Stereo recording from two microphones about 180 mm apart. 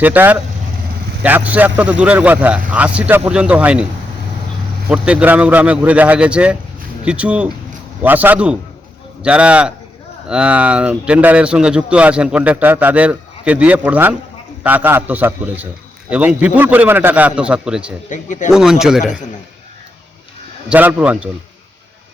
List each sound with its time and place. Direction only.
0.0 s speech: 10° right (ahead or behind)
4.9 s speech: 5° right (ahead or behind)
18.1 s speech: 45° left (ahead or behind)
18.5 s speech: 5° right (ahead or behind)
20.7 s speech: 10° right (ahead or behind)